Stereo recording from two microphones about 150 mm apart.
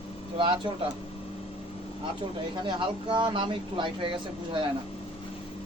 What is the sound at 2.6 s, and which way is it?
Speech, 30° right (ahead or behind).